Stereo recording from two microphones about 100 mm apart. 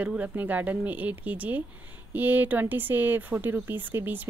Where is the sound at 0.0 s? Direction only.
15° right (ahead or behind).